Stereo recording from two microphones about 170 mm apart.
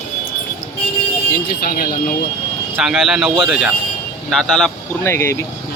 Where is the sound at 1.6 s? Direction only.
60° left (ahead or behind).